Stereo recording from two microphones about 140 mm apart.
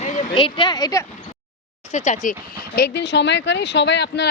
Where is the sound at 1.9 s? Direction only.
55° left (ahead or behind).